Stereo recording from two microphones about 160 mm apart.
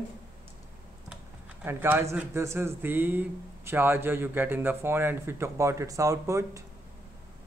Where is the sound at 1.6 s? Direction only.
15° right (ahead or behind).